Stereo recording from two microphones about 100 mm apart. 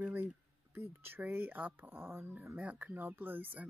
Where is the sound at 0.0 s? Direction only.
20° right (ahead or behind).